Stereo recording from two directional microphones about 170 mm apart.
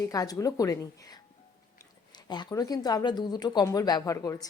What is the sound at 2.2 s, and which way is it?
Speech, 25° left (ahead or behind).